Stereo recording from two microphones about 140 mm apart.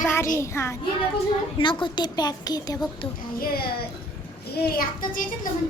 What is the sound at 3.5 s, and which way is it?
A child's voice, 90° left.